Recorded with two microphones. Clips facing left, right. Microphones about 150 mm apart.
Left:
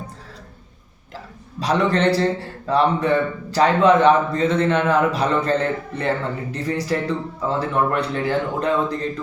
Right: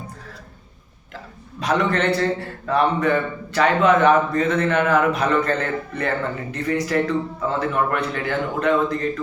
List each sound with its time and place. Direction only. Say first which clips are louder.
1.5 s speech: left 1 dB; 35° left (ahead or behind)